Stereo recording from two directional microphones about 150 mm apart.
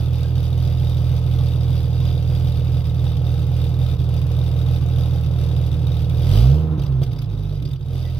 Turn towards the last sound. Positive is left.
turn(degrees=5)  # may be behind; listen again after turning